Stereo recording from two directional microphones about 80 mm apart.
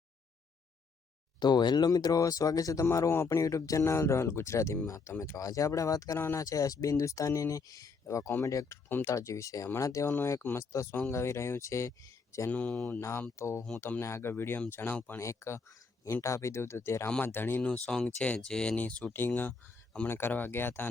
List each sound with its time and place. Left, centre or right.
1.4 s speech: left
2.8 s a man's voice: left
6.1 s a man's voice: left
6.4 s a man's voice: left
12.5 s speech: centre
12.8 s a man's voice: left
15.2 s a man's voice: left
17.6 s speech: centre; by 20.8 s left